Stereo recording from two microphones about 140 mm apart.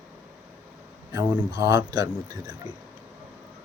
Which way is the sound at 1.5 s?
25° right (ahead or behind).